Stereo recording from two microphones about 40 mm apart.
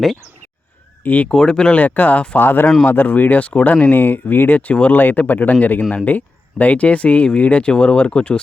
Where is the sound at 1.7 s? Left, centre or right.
Left.